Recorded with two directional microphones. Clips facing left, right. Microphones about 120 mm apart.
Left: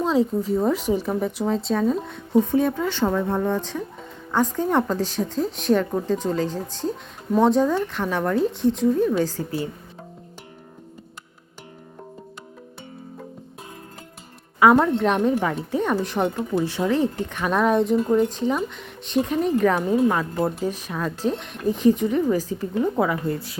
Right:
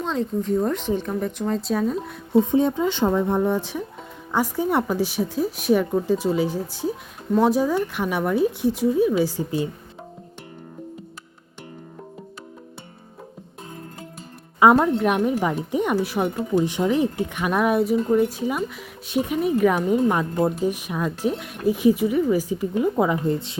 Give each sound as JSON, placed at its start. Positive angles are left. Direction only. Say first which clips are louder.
{"t": 0.0, "sound": "speech", "louder": "left 4 dB", "side_deg": 5}
{"t": 2.4, "sound": "speech", "louder": "right 2 dB", "side_deg": -20}
{"t": 14.6, "sound": "speech", "louder": "even", "side_deg": -20}
{"t": 14.9, "sound": "speech", "louder": "left 1 dB", "side_deg": -10}
{"t": 16.6, "sound": "speech", "louder": "right 1 dB", "side_deg": -15}